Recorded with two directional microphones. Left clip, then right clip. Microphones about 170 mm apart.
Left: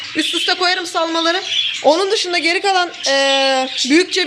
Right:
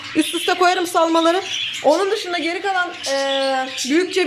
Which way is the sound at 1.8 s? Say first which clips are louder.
Left 1 dB; 5° left (ahead or behind).